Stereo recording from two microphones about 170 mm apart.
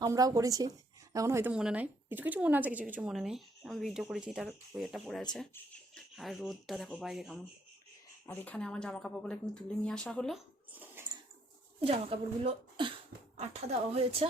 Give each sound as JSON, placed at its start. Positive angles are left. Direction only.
{"t": 0.0, "sound": "a woman's voice", "side_deg": -20}
{"t": 11.0, "sound": "a sound", "side_deg": -10}
{"t": 11.8, "sound": "speech", "side_deg": -35}